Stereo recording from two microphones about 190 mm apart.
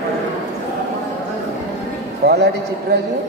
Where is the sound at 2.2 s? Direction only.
60° right (ahead or behind).